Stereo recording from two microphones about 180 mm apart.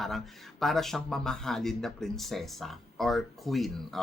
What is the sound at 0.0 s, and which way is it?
Speech, centre (ahead or behind).